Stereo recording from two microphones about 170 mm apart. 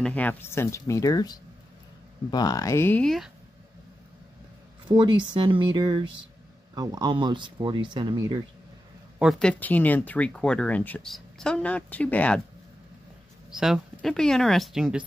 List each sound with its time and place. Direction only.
0.0 s speech: 10° left (ahead or behind)
4.8 s speech: 25° right (ahead or behind)
9.2 s speech: centre (ahead or behind)
13.5 s speech: centre (ahead or behind)